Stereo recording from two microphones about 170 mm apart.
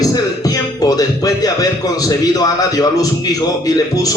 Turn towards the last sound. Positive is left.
turn(degrees=20)  # may be behind; listen again after turning